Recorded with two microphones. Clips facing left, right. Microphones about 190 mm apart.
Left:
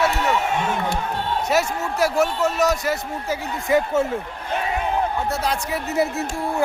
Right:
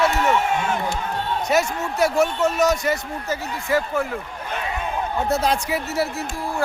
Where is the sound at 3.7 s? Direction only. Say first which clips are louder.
Left 3 dB; 20° left (ahead or behind).